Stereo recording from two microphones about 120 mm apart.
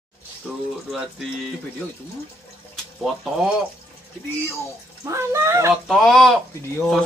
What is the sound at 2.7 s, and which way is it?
Water, centre (ahead or behind).